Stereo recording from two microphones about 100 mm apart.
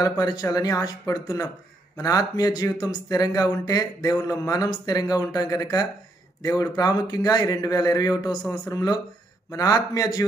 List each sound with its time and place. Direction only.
0.0 s speech: 40° left (ahead or behind)